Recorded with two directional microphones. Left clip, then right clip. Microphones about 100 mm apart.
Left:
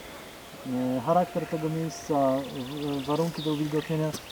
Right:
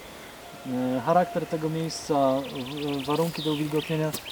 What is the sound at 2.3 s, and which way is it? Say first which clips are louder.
Speech: right 2 dB; centre (ahead or behind).